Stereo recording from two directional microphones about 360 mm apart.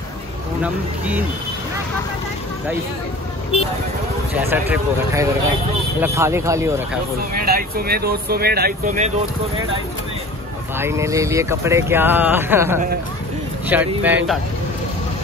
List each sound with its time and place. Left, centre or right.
0.6 s speech: centre
4.4 s speech: centre
7.4 s speech: right
10.8 s speech: centre